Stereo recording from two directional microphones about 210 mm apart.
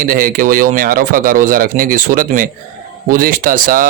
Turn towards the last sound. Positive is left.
turn(degrees=-40)  # may be behind; listen again after turning